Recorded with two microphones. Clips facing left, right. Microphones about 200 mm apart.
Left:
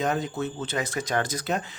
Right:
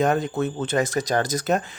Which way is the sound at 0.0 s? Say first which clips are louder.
Right 5 dB; 55° right (ahead or behind).